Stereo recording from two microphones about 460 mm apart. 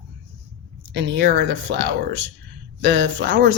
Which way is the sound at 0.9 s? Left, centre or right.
Right.